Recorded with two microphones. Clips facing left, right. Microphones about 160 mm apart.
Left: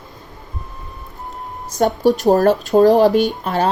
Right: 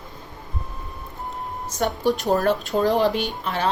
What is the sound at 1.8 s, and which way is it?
A woman's voice, 40° left (ahead or behind).